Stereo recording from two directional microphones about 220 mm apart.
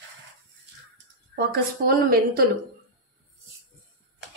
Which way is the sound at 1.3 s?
45° right (ahead or behind).